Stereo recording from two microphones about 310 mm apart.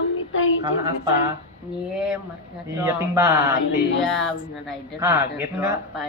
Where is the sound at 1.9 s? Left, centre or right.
Centre.